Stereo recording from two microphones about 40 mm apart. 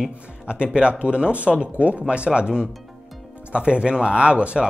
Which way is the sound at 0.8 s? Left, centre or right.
Right.